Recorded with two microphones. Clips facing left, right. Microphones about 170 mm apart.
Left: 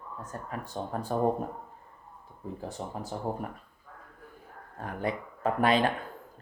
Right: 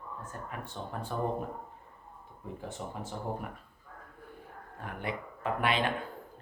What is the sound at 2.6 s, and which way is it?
Speech, 35° left (ahead or behind).